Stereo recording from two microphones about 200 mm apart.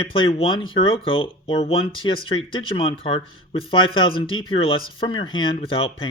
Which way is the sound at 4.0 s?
25° left (ahead or behind).